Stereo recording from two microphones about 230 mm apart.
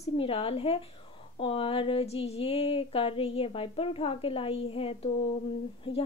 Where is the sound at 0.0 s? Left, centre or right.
Left.